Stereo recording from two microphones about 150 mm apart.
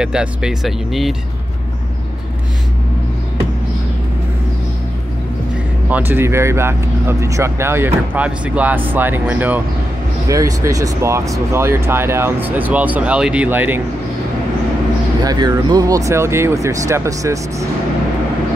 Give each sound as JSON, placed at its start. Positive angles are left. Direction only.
{"t": 0.0, "sound": "speech", "side_deg": -5}
{"t": 5.9, "sound": "speech", "side_deg": -10}
{"t": 15.2, "sound": "speech", "side_deg": -25}